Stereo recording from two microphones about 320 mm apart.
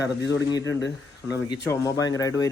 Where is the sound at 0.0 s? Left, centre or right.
Left.